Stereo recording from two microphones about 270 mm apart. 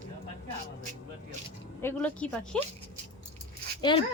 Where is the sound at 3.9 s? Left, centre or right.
Centre.